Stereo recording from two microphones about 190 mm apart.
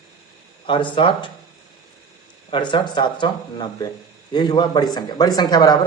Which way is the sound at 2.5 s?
25° left (ahead or behind).